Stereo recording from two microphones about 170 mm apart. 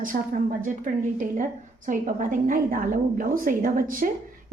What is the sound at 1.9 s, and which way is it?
A woman's voice, 50° right (ahead or behind).